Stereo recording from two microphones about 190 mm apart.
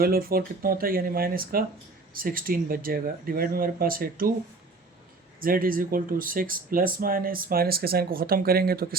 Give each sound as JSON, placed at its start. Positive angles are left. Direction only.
{"t": 0.0, "sound": "speech", "side_deg": -50}
{"t": 5.4, "sound": "speech", "side_deg": -50}